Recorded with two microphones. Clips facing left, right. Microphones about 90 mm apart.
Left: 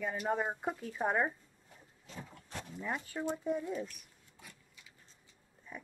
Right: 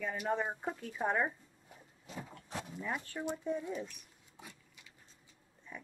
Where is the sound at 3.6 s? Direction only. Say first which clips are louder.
Left 2 dB; 20° right (ahead or behind).